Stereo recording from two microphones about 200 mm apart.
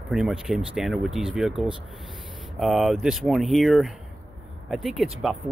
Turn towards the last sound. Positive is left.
turn(degrees=0)  # may be behind; listen again after turning